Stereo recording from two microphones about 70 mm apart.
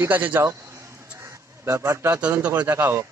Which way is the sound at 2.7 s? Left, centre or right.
Right.